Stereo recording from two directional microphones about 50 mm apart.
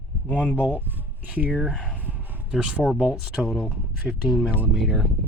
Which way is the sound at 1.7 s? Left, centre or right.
Centre.